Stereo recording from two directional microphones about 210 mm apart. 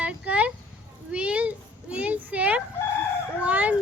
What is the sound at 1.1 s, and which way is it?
A child's voice, 5° right (ahead or behind).